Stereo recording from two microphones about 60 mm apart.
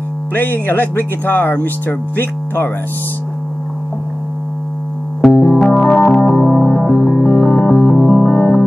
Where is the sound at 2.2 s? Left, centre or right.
Left.